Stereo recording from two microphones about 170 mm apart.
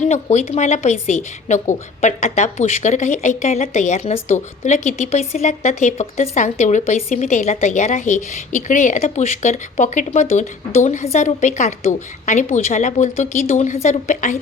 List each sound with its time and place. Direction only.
0.0 s a woman's voice: 40° left (ahead or behind)